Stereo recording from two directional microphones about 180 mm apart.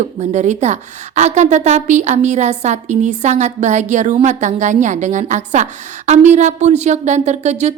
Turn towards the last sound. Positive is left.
turn(degrees=-40)  # may be behind; listen again after turning